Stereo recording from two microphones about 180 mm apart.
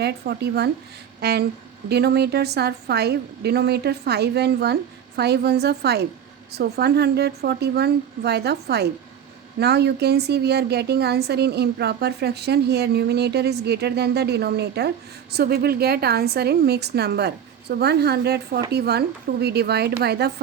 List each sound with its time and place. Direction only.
0.0 s a woman's voice: 65° right (ahead or behind)